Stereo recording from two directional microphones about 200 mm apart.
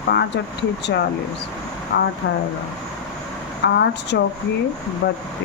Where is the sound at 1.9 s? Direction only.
60° left (ahead or behind).